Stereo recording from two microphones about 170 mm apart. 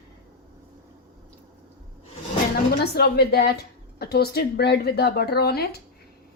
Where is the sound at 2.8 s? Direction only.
70° left (ahead or behind).